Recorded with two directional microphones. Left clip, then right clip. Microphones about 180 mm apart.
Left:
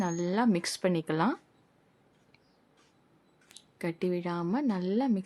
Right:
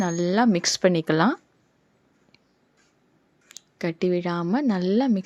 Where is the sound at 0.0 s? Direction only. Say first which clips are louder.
Right 7 dB; 25° right (ahead or behind).